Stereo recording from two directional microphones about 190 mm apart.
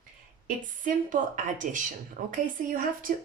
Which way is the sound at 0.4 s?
45° right (ahead or behind).